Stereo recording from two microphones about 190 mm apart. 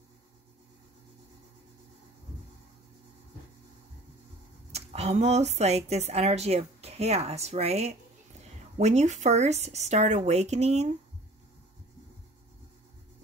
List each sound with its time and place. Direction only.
4.7 s a woman's voice: 35° right (ahead or behind)